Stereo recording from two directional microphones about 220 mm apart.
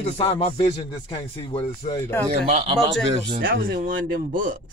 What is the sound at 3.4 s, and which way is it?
Speech, 40° right (ahead or behind).